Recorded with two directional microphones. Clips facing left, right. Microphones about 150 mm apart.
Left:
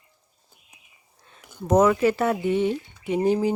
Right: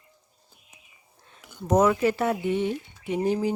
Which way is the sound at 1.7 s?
90° left.